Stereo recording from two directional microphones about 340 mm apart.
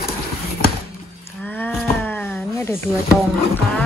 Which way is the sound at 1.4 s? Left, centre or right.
Centre.